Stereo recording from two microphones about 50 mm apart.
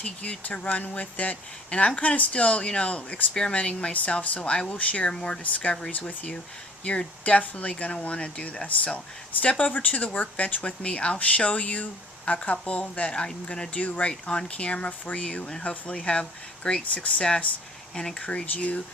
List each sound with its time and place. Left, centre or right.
0.0 s speech: left
5.4 s speech: left
7.3 s speech: left
13.7 s speech: left
14.1 s speech: centre